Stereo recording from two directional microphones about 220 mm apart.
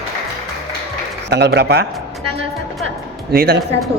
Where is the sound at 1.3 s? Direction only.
50° right (ahead or behind).